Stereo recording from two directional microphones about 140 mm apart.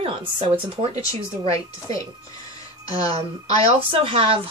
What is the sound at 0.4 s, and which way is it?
Speech, 45° right (ahead or behind).